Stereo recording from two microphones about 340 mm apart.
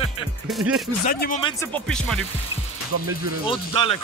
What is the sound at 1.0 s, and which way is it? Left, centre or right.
Speech, left.